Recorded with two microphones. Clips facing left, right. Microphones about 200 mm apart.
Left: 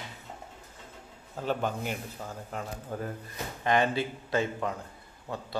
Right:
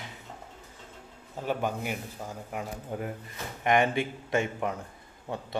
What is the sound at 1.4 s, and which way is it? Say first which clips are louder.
A man's voice: even; 10° right (ahead or behind).